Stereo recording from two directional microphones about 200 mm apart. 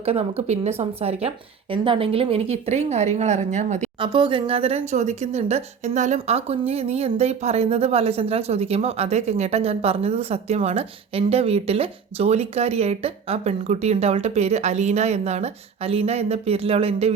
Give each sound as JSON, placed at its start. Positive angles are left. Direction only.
{"t": 0.0, "sound": "speech", "side_deg": -30}
{"t": 4.0, "sound": "speech", "side_deg": -25}